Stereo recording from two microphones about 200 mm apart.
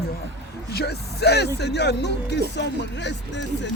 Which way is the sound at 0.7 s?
55° left (ahead or behind).